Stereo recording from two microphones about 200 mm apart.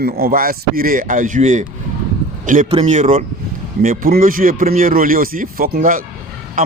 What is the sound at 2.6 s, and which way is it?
Speech, 30° right (ahead or behind).